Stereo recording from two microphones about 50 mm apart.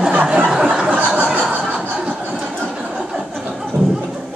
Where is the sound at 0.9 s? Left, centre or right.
Right.